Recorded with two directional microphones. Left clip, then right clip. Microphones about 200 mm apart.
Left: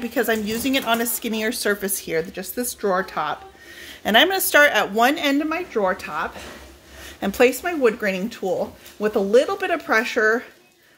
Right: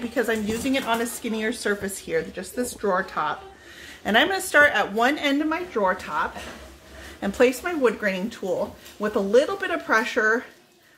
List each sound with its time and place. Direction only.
0.1 s speech: 40° left (ahead or behind)